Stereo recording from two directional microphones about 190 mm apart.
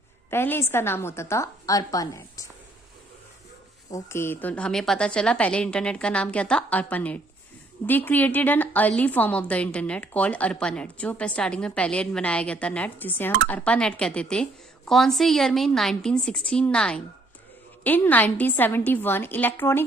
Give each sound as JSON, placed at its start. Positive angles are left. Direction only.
{"t": 0.3, "sound": "a woman's voice", "side_deg": 10}
{"t": 3.9, "sound": "a woman's voice", "side_deg": 15}